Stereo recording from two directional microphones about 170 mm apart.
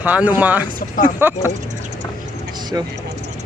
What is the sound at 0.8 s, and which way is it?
Speech, 50° left (ahead or behind).